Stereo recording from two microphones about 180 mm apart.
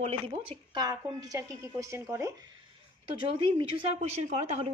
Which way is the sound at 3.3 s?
30° right (ahead or behind).